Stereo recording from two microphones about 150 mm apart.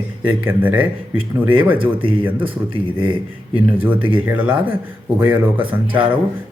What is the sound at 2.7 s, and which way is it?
Speech, 35° right (ahead or behind).